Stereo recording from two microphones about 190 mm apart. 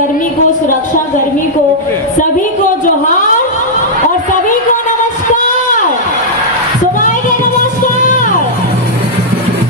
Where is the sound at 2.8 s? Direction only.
45° left (ahead or behind).